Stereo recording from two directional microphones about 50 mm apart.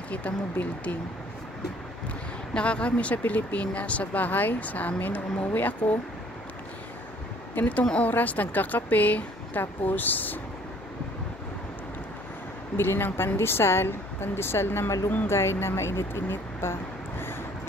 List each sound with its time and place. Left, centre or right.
0.1 s speech: left
2.5 s speech: left
7.6 s speech: left
12.7 s a woman's voice: left